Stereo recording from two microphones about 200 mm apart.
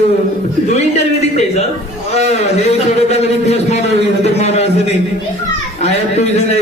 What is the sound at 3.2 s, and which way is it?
A man's voice, 30° left (ahead or behind).